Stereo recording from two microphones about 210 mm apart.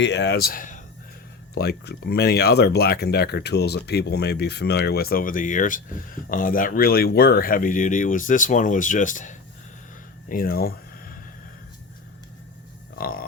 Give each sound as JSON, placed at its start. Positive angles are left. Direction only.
{"t": 0.0, "sound": "speech", "side_deg": 55}
{"t": 10.2, "sound": "a sound", "side_deg": 45}
{"t": 13.0, "sound": "grunt", "side_deg": 45}